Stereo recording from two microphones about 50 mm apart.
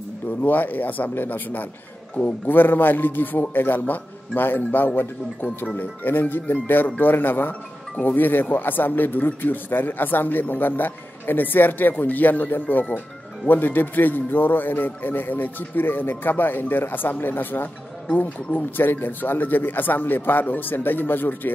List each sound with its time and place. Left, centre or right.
0.4 s speech: left